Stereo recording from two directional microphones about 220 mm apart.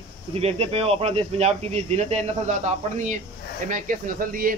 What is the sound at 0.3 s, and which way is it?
Speech, 30° right (ahead or behind).